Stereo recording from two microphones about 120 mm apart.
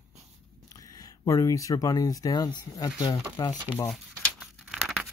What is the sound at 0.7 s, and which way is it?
Speech, 30° left (ahead or behind).